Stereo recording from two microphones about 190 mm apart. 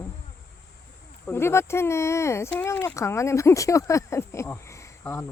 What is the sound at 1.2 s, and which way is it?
Speech, 15° left (ahead or behind).